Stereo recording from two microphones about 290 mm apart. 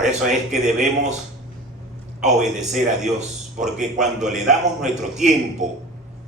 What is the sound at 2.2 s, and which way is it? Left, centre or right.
A man's voice, right.